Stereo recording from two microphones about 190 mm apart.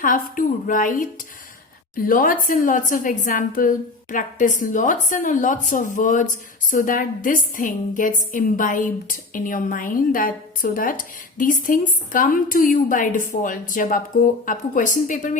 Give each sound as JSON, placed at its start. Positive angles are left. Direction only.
{"t": 0.0, "sound": "a woman's voice", "side_deg": 45}
{"t": 2.0, "sound": "a woman's voice", "side_deg": 45}